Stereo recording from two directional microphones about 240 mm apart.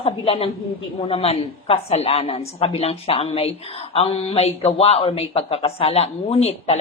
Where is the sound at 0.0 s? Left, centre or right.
Left.